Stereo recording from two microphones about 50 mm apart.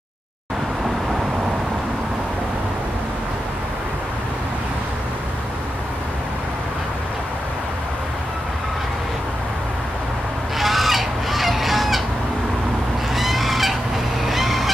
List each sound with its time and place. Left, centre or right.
10.6 s fowl: centre
13.1 s fowl: centre